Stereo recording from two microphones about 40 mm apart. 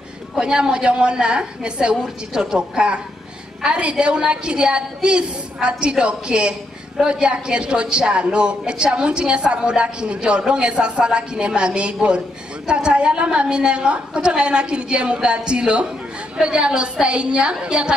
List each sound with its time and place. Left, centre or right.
0.4 s a woman's voice: right